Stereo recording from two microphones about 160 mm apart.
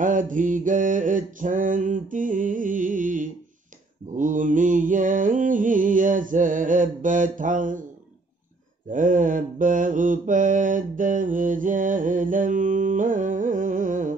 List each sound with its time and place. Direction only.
0.0 s mantra: 55° right (ahead or behind)
8.9 s mantra: 55° right (ahead or behind)